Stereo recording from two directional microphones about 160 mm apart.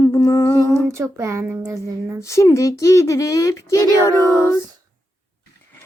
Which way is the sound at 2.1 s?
20° left (ahead or behind).